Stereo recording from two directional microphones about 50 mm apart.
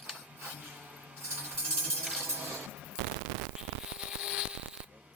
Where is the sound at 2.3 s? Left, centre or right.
Right.